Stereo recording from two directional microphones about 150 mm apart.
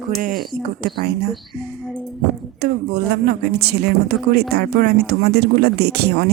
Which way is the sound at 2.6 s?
90° right.